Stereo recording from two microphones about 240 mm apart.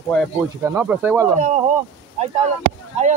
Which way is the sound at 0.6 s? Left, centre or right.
Centre.